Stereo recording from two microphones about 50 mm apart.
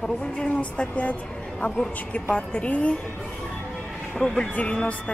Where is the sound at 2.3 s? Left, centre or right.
Left.